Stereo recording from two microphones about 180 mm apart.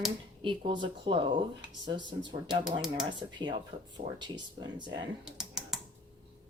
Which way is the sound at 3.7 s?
45° right (ahead or behind).